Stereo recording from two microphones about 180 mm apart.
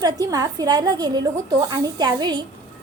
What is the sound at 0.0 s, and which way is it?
A woman's voice, 20° right (ahead or behind).